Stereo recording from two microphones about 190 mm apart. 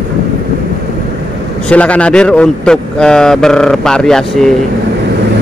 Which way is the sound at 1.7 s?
5° left (ahead or behind).